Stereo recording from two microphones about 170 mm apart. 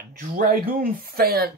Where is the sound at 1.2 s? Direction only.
65° right (ahead or behind).